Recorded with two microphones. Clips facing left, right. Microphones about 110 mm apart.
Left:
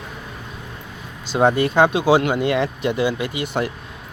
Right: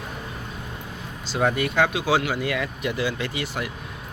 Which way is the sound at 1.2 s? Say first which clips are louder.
Left 6 dB; 20° left (ahead or behind).